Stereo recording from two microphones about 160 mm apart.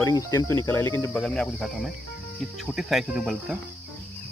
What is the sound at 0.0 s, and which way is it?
Speech, 20° left (ahead or behind).